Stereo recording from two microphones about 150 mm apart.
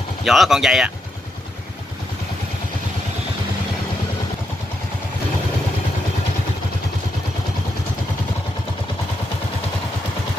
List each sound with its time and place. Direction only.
0.2 s speech: centre (ahead or behind)